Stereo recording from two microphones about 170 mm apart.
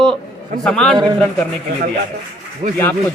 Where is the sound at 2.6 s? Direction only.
45° right (ahead or behind).